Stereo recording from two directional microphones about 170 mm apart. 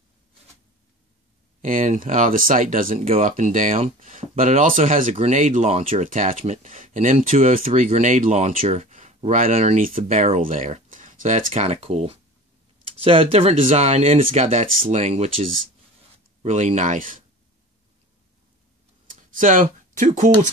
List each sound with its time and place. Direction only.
1.6 s speech: 50° right (ahead or behind)
9.8 s speech: 55° right (ahead or behind)
19.0 s a sound: 50° right (ahead or behind)